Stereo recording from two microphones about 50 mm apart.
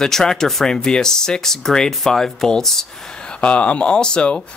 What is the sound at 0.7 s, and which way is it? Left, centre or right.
Speech, centre.